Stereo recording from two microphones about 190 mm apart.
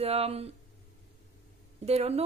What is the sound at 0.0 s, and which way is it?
Speech, 35° right (ahead or behind).